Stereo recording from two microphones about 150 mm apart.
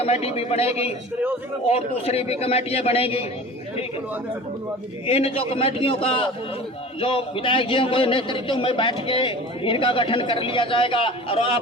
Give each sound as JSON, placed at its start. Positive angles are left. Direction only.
{"t": 0.0, "sound": "a man's voice", "side_deg": 45}
{"t": 5.0, "sound": "a man's voice", "side_deg": 40}